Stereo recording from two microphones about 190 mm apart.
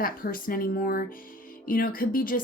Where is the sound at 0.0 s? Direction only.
50° left (ahead or behind).